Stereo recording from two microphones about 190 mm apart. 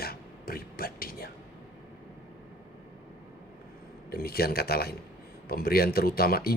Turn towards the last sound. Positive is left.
turn(degrees=55)  # may be behind; listen again after turning